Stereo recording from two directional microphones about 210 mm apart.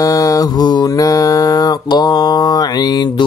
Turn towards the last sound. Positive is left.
turn(degrees=20)  # may be behind; listen again after turning